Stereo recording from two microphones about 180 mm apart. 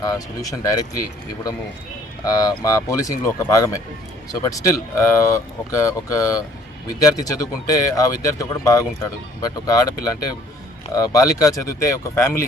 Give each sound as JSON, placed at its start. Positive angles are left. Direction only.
{"t": 0.0, "sound": "speech", "side_deg": 20}
{"t": 2.2, "sound": "speech", "side_deg": 20}